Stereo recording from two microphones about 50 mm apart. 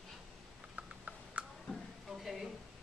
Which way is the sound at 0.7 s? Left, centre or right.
Right.